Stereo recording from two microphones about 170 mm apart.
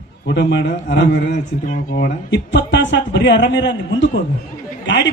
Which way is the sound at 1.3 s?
50° left (ahead or behind).